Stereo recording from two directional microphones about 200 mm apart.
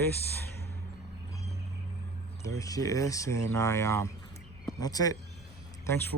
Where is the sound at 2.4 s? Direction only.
15° left (ahead or behind).